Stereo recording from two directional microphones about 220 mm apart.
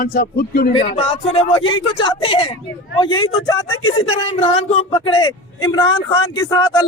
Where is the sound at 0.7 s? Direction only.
25° left (ahead or behind).